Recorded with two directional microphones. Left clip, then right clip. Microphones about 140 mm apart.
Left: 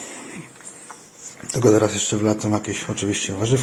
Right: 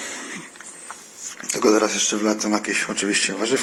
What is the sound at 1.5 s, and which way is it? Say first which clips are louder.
Speech: left 1 dB; 30° left (ahead or behind).